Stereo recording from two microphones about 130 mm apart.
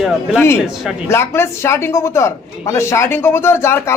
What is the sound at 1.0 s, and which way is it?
A man's voice, 20° left (ahead or behind).